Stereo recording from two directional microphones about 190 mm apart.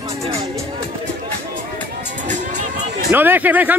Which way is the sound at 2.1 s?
40° right (ahead or behind).